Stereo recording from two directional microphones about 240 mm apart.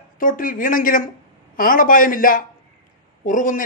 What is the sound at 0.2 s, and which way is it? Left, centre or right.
A man's voice, left.